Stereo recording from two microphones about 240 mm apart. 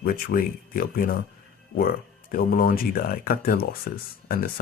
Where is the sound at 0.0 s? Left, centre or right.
Left.